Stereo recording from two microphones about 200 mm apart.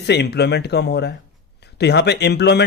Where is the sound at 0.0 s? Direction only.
55° left (ahead or behind).